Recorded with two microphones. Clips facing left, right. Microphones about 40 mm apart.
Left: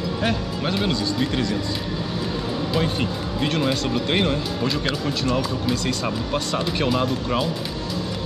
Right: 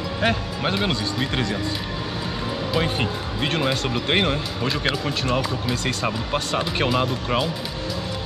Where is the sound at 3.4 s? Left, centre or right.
Centre.